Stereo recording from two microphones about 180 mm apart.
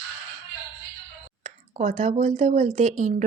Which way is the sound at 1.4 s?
40° right (ahead or behind).